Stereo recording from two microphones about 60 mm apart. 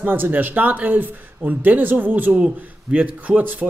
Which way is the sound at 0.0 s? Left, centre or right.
Right.